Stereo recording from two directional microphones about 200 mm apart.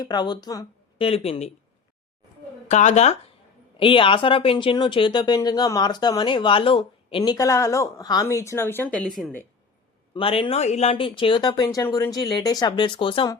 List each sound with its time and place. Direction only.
0.0 s speech: 20° left (ahead or behind)
2.6 s speech: 35° left (ahead or behind); by 9.4 s centre (ahead or behind)
10.2 s speech: 25° left (ahead or behind)